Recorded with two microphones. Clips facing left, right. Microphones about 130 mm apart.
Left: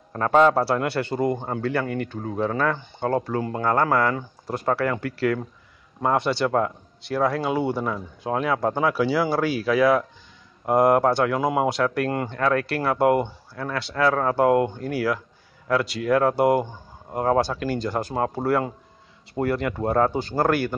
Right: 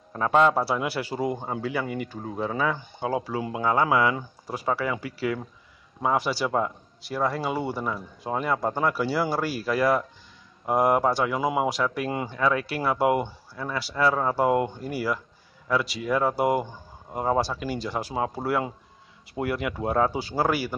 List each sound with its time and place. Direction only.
0.1 s a man's voice: centre (ahead or behind)